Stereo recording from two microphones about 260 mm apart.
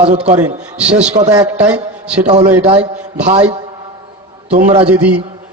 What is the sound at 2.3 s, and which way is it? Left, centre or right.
A man's voice, right.